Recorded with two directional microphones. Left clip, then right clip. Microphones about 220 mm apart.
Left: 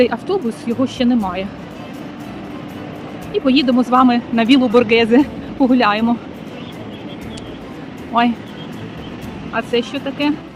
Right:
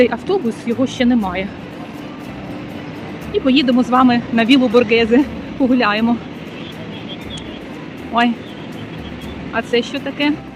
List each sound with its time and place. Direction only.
0.0 s speech: centre (ahead or behind)
3.3 s speech: centre (ahead or behind)
8.1 s speech: centre (ahead or behind)
9.5 s speech: centre (ahead or behind)